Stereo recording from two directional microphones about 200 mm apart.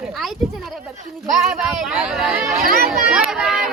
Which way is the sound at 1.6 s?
Centre (ahead or behind).